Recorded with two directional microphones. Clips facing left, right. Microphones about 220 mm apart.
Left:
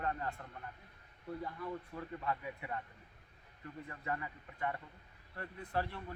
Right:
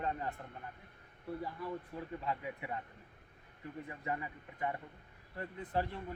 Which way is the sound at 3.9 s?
20° right (ahead or behind).